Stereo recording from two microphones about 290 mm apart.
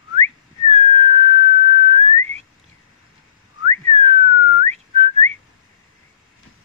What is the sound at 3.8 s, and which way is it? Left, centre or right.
Whistling, right.